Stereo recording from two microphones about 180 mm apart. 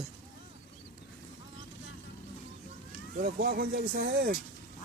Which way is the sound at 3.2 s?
50° right (ahead or behind).